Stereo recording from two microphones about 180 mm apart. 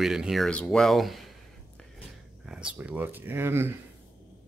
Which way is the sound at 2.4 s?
5° right (ahead or behind).